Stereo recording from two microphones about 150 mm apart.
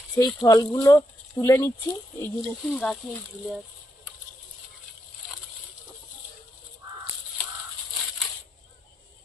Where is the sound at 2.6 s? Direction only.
Centre (ahead or behind).